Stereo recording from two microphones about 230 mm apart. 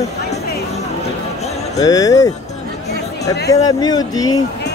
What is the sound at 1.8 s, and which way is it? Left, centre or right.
Speech, centre.